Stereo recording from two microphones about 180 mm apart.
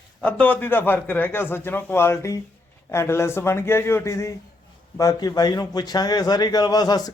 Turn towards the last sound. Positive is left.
turn(degrees=20)  # may be behind; listen again after turning